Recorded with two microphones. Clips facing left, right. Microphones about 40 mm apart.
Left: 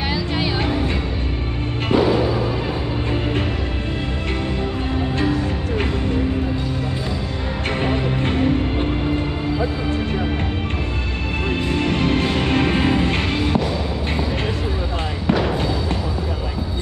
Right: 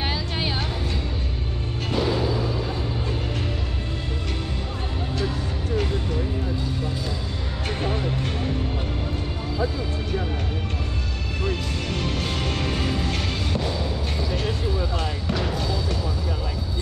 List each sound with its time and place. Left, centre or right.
0.6 s music: left
1.9 s music: left
7.8 s music: left
11.7 s music: left
15.2 s basketball bounce: left